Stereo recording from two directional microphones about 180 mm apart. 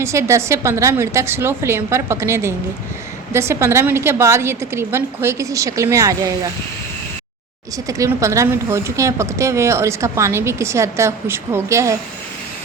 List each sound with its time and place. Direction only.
0.0 s a woman's voice: 15° right (ahead or behind)
7.9 s a woman's voice: 20° right (ahead or behind)